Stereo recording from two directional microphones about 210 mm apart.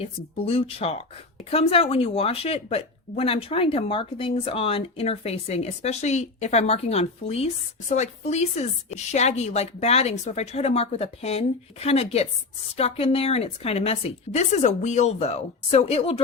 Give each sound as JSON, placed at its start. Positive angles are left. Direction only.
{"t": 0.0, "sound": "speech", "side_deg": 30}